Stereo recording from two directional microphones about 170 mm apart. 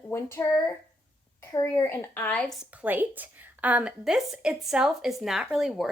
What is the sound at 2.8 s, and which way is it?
A woman's voice, 10° right (ahead or behind).